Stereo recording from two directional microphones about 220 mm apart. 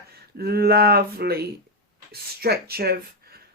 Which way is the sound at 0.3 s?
45° right (ahead or behind).